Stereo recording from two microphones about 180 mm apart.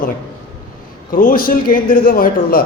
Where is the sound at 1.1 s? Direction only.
50° left (ahead or behind).